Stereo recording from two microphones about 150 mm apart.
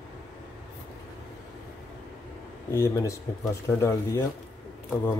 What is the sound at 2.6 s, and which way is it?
Speech, 20° left (ahead or behind).